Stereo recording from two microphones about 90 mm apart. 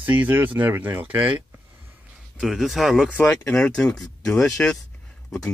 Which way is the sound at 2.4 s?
5° right (ahead or behind).